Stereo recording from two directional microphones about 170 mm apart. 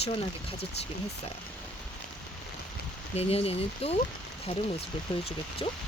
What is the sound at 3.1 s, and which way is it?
Speech, 35° left (ahead or behind).